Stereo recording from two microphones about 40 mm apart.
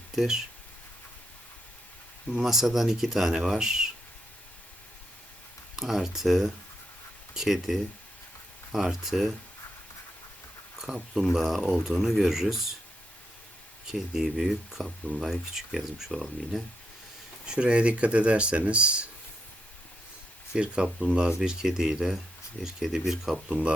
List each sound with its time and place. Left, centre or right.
2.4 s speech: centre
5.7 s speech: centre
10.8 s speech: centre
14.1 s speech: centre
17.4 s speech: right
20.5 s speech: right
21.3 s speech: centre
23.5 s speech: right